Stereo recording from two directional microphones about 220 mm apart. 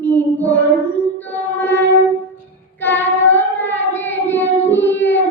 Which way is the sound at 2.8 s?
10° left (ahead or behind).